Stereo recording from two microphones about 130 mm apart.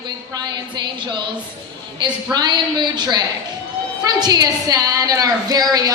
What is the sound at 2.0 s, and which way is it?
A woman's voice, 35° right (ahead or behind).